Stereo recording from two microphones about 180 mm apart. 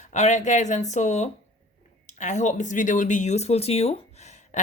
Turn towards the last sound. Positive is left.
turn(degrees=35)  # may be behind; listen again after turning